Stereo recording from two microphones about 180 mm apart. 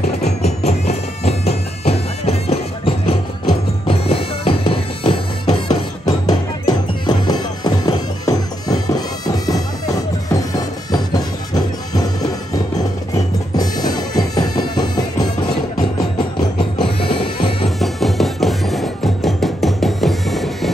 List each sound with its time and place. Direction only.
0.2 s music: 35° left (ahead or behind); by 10.4 s 20° left (ahead or behind)
11.9 s music: 20° left (ahead or behind)
13.6 s music: 20° left (ahead or behind)
16.5 s music: 30° left (ahead or behind)
17.6 s music: centre (ahead or behind)